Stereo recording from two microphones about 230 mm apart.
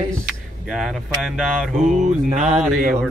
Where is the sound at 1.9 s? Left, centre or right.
Right.